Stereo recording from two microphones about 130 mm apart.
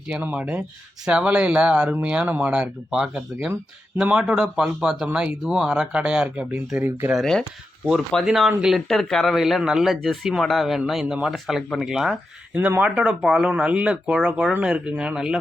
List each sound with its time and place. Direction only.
0.1 s speech: 10° right (ahead or behind)
7.1 s speech: centre (ahead or behind)